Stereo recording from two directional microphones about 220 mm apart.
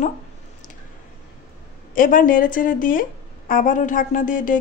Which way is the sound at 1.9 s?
40° left (ahead or behind).